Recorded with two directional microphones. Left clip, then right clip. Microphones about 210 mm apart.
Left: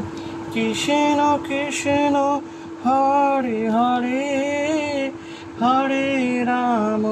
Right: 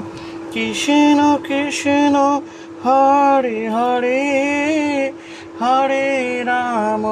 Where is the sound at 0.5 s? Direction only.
45° right (ahead or behind).